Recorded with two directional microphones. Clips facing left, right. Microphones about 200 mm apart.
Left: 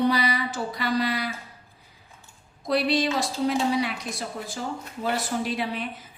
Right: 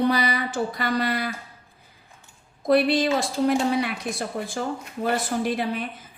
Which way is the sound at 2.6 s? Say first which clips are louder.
Right 4 dB; 55° right (ahead or behind).